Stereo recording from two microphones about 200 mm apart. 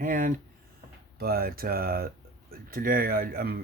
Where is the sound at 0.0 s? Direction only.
45° right (ahead or behind).